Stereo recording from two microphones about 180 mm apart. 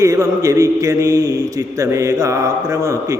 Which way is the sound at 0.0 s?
15° right (ahead or behind).